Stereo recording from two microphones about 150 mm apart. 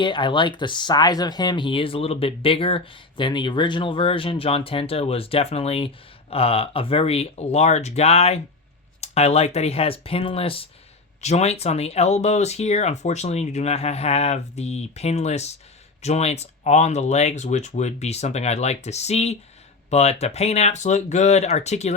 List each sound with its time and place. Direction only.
0.0 s speech: 30° left (ahead or behind); by 21.9 s 50° left (ahead or behind)